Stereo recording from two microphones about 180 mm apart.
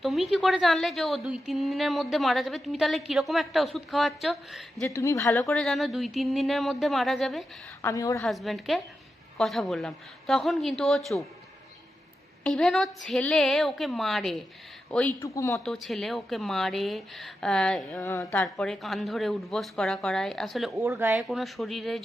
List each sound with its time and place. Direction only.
0.0 s a woman's voice: centre (ahead or behind)
4.9 s speech: 15° left (ahead or behind)
5.5 s a woman's voice: 5° left (ahead or behind)
7.8 s speech: 15° left (ahead or behind)
8.2 s a woman's voice: centre (ahead or behind)
12.4 s a woman's voice: 5° left (ahead or behind)
15.6 s a woman's voice: centre (ahead or behind)